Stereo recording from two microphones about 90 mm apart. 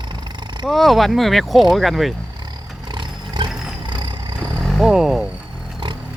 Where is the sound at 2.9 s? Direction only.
55° right (ahead or behind).